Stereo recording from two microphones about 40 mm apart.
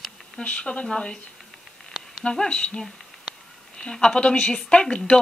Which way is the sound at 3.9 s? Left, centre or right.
Left.